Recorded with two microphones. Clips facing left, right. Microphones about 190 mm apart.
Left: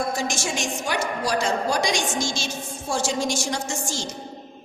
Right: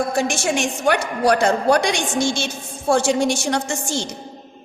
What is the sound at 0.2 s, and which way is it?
A woman's voice, 60° right (ahead or behind).